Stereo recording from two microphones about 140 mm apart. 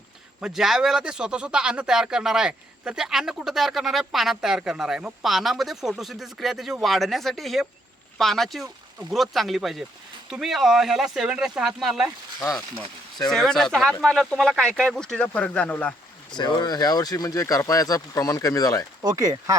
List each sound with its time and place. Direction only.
0.4 s speech: 5° right (ahead or behind)
16.4 s speech: 30° left (ahead or behind)
19.0 s speech: 25° right (ahead or behind)